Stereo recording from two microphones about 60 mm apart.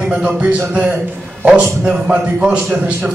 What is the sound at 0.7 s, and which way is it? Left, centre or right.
Speech, right.